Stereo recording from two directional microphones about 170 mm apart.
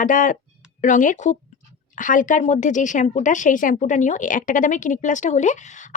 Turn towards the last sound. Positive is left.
turn(degrees=45)  # may be behind; listen again after turning